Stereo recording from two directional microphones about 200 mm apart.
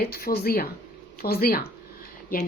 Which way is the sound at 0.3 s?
50° left (ahead or behind).